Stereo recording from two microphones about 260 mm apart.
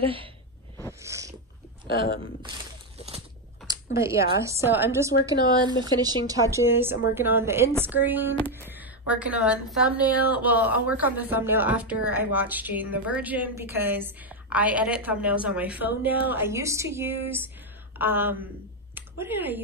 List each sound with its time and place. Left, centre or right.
0.0 s speech: right
1.0 s cat: centre
3.6 s a woman's voice: centre